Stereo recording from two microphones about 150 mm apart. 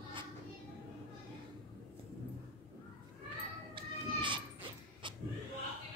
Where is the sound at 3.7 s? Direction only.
35° right (ahead or behind).